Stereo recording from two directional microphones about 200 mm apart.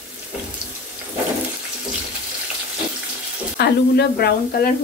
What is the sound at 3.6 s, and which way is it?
Speech, 55° left (ahead or behind).